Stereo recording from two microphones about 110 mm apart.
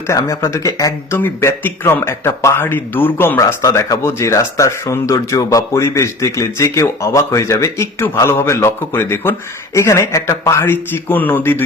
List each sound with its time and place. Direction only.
0.1 s speech: 25° left (ahead or behind)